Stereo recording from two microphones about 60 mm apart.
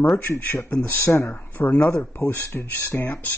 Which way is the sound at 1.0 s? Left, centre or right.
Left.